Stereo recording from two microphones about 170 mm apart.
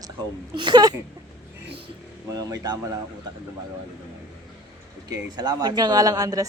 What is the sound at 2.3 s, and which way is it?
Speech, 20° right (ahead or behind).